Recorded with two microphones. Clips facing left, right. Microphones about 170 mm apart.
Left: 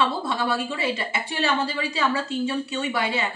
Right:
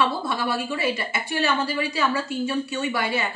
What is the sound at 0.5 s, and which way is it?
Speech, 25° left (ahead or behind).